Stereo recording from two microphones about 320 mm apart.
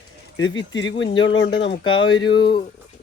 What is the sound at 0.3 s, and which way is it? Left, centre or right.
Speech, left.